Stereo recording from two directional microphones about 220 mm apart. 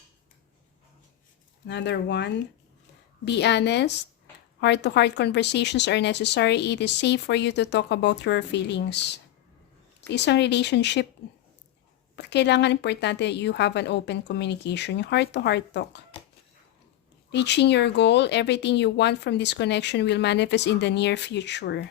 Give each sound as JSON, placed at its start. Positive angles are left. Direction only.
{"t": 1.6, "sound": "a woman's voice", "side_deg": 50}
{"t": 12.1, "sound": "a woman's voice", "side_deg": 50}
{"t": 17.3, "sound": "a woman's voice", "side_deg": 50}